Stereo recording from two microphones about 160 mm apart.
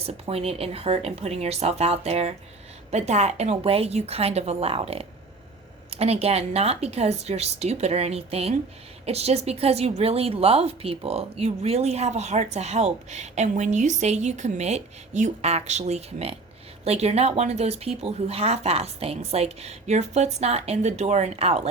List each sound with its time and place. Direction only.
0.0 s a woman's voice: 40° right (ahead or behind)